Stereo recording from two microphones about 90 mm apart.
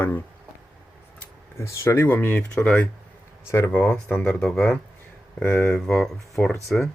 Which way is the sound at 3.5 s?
30° left (ahead or behind).